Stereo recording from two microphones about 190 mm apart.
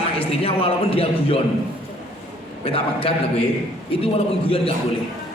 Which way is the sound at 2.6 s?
30° left (ahead or behind).